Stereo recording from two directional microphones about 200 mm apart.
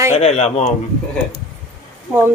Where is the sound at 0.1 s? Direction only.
35° left (ahead or behind).